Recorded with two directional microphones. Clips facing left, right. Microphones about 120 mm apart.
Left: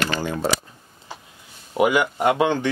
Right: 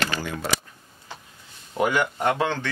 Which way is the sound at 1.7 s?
10° left (ahead or behind).